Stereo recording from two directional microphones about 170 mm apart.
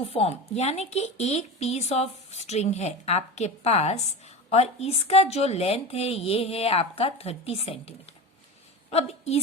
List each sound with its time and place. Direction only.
0.0 s a woman's voice: 35° left (ahead or behind)